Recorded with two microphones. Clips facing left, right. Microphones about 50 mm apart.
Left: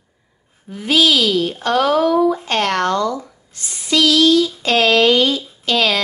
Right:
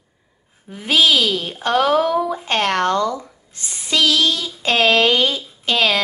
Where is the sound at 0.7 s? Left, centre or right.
Right.